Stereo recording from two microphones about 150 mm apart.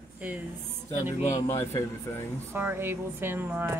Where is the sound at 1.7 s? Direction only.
20° left (ahead or behind).